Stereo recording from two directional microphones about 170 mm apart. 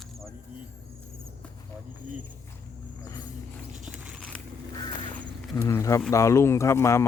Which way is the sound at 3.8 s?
5° right (ahead or behind).